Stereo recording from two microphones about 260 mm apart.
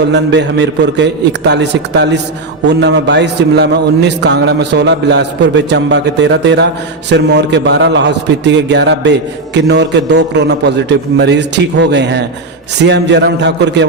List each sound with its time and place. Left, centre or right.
0.1 s a man's voice: right